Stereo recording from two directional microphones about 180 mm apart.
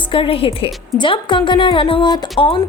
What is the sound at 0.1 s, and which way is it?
A woman's voice, 30° left (ahead or behind).